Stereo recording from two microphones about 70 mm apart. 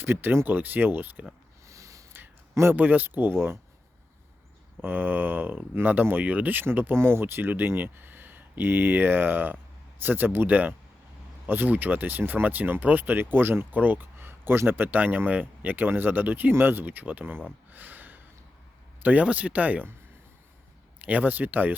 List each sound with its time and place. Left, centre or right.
0.0 s speech: right
1.6 s a sound: right
2.1 s speech: right
4.8 s speech: right
17.7 s a sound: right
19.0 s speech: right
21.0 s speech: right